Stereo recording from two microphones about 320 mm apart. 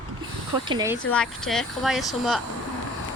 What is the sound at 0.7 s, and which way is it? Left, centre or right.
Speech, centre.